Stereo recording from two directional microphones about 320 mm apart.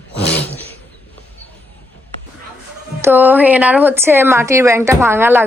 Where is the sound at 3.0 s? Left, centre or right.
Centre.